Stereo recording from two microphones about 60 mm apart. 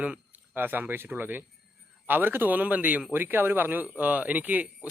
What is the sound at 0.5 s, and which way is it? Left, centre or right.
A man's voice, right.